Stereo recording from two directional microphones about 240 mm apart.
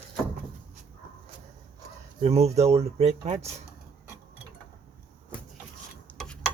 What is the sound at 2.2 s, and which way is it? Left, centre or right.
Speech, right.